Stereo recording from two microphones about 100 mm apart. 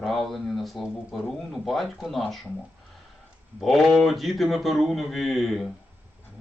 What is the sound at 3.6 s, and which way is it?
Speech, centre (ahead or behind).